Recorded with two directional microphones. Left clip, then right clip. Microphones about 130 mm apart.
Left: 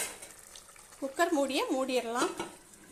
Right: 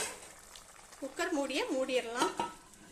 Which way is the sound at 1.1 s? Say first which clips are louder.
Left 5 dB; 20° left (ahead or behind).